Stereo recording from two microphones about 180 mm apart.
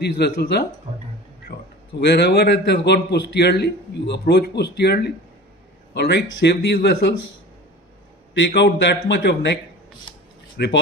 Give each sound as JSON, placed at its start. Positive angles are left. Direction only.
{"t": 0.0, "sound": "speech", "side_deg": 65}
{"t": 2.0, "sound": "a man's voice", "side_deg": 65}
{"t": 8.4, "sound": "a man's voice", "side_deg": 75}
{"t": 10.6, "sound": "speech", "side_deg": 60}